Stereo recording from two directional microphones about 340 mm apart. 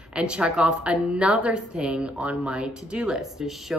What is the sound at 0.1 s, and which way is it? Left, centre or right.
A woman's voice, centre.